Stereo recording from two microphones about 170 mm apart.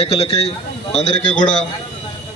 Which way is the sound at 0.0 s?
35° left (ahead or behind).